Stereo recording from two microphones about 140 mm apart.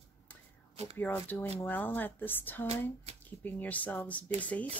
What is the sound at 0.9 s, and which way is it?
Speech, 15° left (ahead or behind).